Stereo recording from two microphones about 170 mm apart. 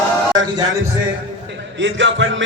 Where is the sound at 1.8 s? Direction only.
90° right.